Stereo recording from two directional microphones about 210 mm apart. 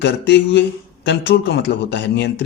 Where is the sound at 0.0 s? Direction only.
55° left (ahead or behind).